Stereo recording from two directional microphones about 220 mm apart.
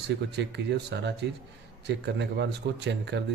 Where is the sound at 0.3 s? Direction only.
50° right (ahead or behind).